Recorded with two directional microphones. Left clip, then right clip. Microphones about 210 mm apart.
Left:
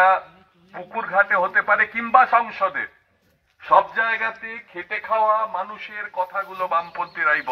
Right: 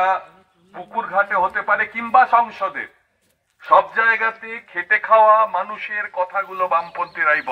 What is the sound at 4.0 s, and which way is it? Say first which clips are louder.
Speech: right 5 dB; 15° right (ahead or behind).